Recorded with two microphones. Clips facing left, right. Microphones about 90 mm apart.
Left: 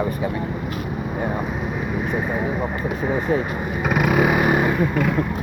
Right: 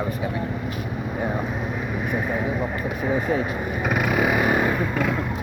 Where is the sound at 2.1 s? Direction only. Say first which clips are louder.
Even; 15° left (ahead or behind).